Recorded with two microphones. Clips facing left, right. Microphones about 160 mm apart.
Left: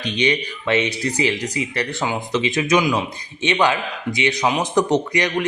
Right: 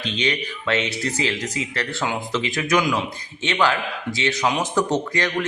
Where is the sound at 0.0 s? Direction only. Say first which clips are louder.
Left 4 dB; 15° left (ahead or behind).